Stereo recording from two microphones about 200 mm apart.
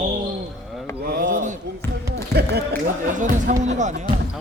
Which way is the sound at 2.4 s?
50° right (ahead or behind).